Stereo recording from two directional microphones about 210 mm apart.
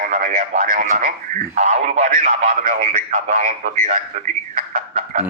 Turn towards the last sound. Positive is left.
turn(degrees=-35)  # may be behind; listen again after turning